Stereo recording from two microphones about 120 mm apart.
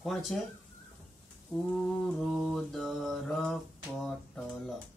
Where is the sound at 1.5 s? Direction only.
5° right (ahead or behind).